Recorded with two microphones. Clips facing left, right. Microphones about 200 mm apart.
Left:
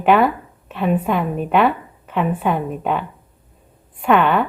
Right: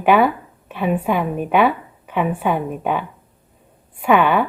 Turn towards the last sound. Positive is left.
turn(degrees=-5)  # may be behind; listen again after turning